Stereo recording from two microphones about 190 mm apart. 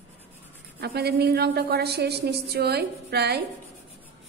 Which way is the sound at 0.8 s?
55° right (ahead or behind).